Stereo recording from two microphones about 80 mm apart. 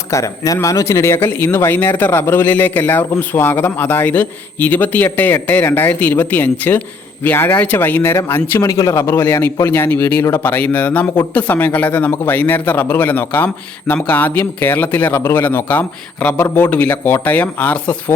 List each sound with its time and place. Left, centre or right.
0.1 s speech: left
8.6 s a man's voice: left; by 17.9 s centre